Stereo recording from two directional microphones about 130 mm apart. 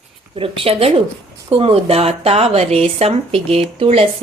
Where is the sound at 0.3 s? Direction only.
45° right (ahead or behind).